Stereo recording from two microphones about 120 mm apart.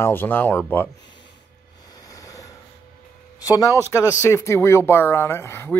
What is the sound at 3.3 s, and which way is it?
Speech, 30° left (ahead or behind).